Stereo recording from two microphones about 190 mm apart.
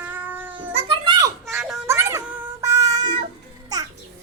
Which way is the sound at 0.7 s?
30° right (ahead or behind).